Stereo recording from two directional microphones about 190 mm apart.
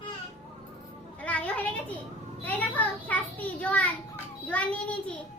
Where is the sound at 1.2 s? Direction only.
5° left (ahead or behind).